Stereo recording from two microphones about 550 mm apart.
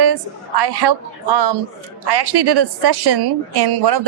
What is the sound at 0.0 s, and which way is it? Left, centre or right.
A woman's voice, right.